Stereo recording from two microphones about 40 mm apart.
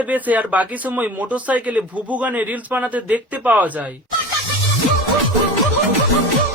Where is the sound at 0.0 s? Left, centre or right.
Right.